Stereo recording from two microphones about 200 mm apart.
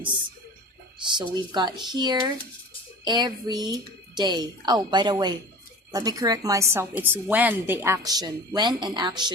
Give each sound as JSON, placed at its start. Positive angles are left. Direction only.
{"t": 0.9, "sound": "a woman's voice", "side_deg": -25}